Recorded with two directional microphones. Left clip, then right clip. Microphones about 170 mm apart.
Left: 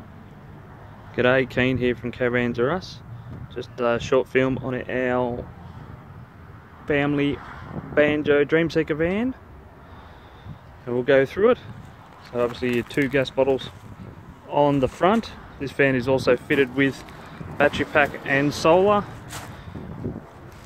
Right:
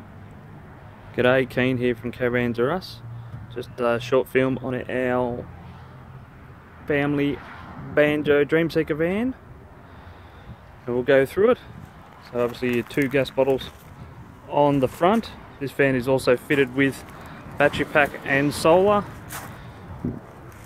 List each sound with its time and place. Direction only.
1.1 s speech: 5° right (ahead or behind)
6.9 s speech: 5° left (ahead or behind)
7.3 s a sound: 50° right (ahead or behind)
7.9 s speech: 5° right (ahead or behind)
10.9 s speech: 5° right (ahead or behind)